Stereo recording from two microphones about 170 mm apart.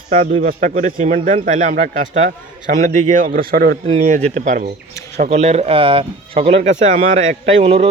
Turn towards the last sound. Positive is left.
turn(degrees=-35)  # may be behind; listen again after turning